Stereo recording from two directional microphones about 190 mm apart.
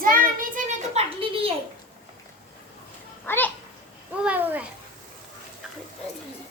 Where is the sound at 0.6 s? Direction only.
35° right (ahead or behind).